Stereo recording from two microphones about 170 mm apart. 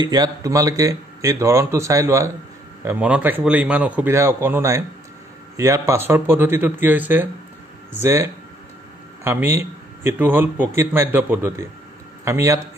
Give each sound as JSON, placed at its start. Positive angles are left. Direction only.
{"t": 0.0, "sound": "a man's voice", "side_deg": -25}